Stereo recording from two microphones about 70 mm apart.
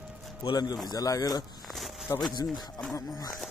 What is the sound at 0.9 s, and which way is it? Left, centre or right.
Speech, left.